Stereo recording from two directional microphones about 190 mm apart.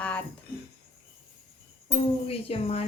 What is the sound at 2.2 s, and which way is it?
Speech, 30° left (ahead or behind).